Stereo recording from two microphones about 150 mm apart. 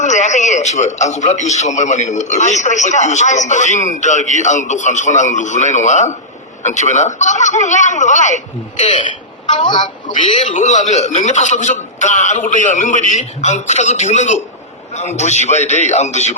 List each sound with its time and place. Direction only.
0.0 s a man's voice: 50° left (ahead or behind)
9.5 s speech: 35° left (ahead or behind)
10.1 s a man's voice: 55° left (ahead or behind)